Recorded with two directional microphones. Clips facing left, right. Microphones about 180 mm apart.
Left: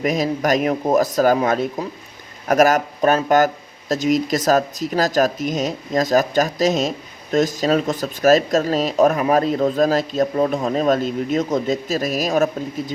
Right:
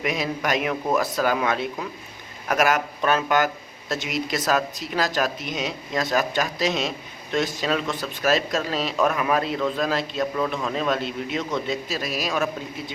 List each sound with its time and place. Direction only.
0.0 s speech: 40° left (ahead or behind)